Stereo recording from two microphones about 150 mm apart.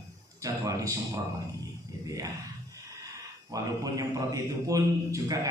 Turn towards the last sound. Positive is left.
turn(degrees=-20)  # may be behind; listen again after turning